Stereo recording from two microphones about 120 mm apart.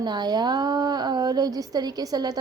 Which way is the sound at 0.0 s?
35° right (ahead or behind).